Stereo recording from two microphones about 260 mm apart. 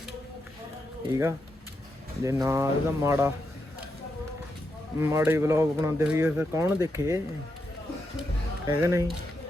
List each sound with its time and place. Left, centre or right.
1.1 s speech: centre
4.9 s speech: centre
8.6 s speech: centre